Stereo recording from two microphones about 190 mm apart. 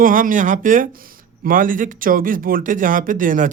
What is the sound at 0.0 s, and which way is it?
Speech, 45° right (ahead or behind).